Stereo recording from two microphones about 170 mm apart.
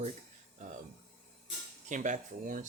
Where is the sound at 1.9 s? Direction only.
45° right (ahead or behind).